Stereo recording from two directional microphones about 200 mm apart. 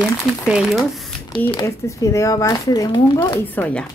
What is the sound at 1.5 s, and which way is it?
Speech, 15° left (ahead or behind).